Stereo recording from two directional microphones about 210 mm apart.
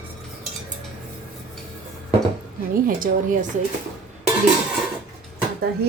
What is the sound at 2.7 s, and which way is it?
Speech, 40° right (ahead or behind).